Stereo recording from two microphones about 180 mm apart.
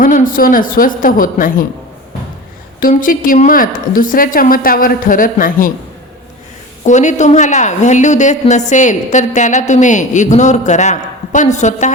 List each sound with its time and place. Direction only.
0.0 s a woman's voice: 50° left (ahead or behind)
2.8 s a woman's voice: 50° left (ahead or behind)
6.8 s a woman's voice: 40° left (ahead or behind)